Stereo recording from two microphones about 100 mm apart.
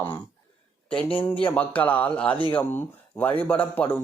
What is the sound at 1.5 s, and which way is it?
Speech, 15° left (ahead or behind).